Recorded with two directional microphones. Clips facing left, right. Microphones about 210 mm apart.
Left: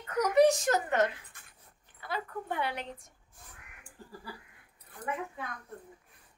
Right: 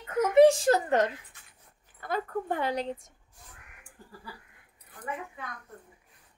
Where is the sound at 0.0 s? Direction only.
25° right (ahead or behind).